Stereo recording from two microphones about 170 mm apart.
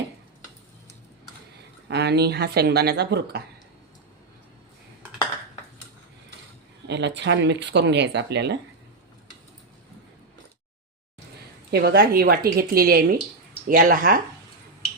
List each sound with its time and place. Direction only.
1.9 s speech: 80° right
6.8 s speech: 90° right
11.7 s a woman's voice: 75° right (ahead or behind); by 14.2 s 55° right (ahead or behind)